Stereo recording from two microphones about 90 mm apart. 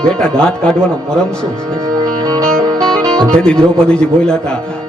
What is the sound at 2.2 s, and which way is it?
Music, 45° right (ahead or behind).